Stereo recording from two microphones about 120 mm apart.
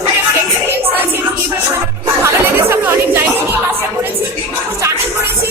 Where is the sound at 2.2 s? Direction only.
20° right (ahead or behind).